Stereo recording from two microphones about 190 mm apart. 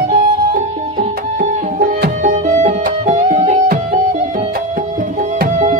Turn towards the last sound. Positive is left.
turn(degrees=-40)  # may be behind; listen again after turning